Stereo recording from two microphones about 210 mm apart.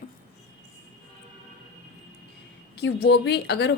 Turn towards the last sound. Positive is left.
turn(degrees=55)  # may be behind; listen again after turning